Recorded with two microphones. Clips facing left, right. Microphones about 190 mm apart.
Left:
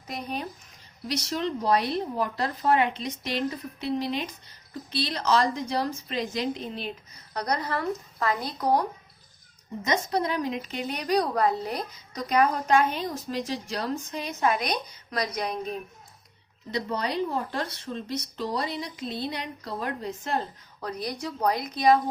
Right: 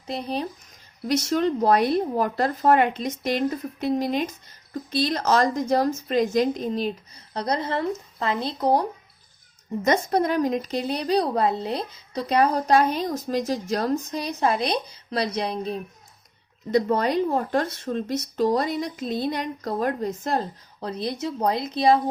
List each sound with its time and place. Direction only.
0.1 s a woman's voice: 35° right (ahead or behind)
1.0 s a woman's voice: 50° right (ahead or behind)
7.3 s speech: 25° right (ahead or behind)
9.8 s a woman's voice: 50° right (ahead or behind); by 15.8 s 30° right (ahead or behind)
16.7 s a woman's voice: 50° right (ahead or behind)
20.8 s speech: 25° right (ahead or behind)